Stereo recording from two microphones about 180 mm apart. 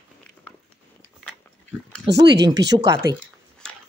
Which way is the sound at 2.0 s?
70° right (ahead or behind).